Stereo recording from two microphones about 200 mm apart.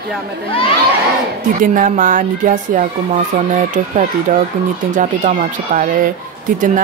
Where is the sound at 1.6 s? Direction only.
40° right (ahead or behind).